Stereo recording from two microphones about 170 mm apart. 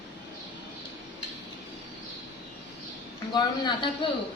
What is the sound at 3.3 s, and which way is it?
Speech, 25° left (ahead or behind).